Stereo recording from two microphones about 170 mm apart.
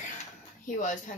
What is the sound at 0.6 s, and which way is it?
Speech, 50° left (ahead or behind).